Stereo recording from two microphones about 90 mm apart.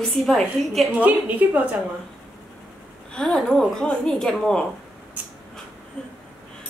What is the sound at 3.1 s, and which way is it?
A woman's voice, 5° left (ahead or behind).